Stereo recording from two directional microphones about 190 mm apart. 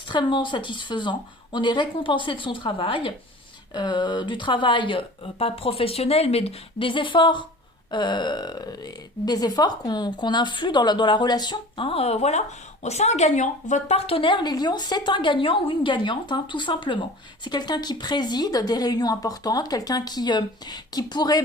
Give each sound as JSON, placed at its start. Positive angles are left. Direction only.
{"t": 0.1, "sound": "speech", "side_deg": 25}